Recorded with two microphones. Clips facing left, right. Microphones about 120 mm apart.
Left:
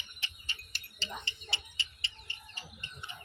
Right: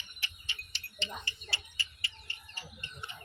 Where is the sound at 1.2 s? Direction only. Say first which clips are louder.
Even; 20° left (ahead or behind).